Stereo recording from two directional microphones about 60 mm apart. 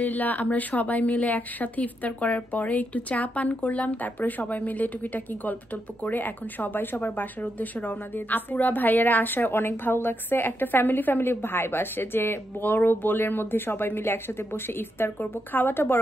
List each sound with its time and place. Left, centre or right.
0.0 s speech: left